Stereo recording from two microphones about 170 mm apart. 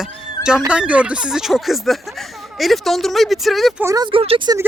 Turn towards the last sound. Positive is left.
turn(degrees=-25)  # may be behind; listen again after turning